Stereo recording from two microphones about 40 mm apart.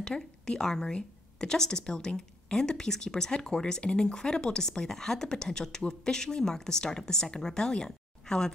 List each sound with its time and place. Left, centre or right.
0.0 s speech: centre